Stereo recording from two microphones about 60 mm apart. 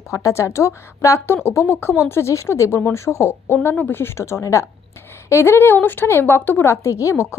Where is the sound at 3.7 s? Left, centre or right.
Left.